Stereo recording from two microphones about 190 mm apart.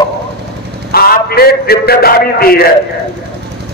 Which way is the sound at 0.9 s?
55° left (ahead or behind).